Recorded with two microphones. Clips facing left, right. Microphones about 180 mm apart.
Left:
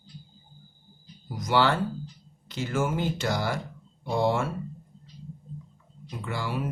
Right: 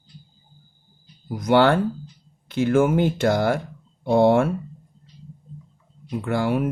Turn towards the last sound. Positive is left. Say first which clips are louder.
# right 9 dB
turn(degrees=-55)  # may be behind; listen again after turning